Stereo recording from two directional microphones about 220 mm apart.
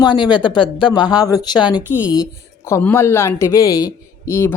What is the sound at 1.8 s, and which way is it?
Speech, 5° right (ahead or behind).